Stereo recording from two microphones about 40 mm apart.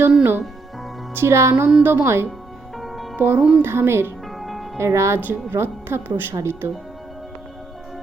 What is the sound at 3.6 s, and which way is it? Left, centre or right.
Speech, right.